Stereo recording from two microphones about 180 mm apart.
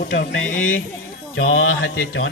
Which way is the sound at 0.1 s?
80° left.